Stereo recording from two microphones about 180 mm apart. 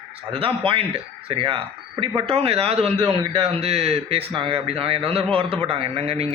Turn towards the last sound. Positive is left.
turn(degrees=-35)  # may be behind; listen again after turning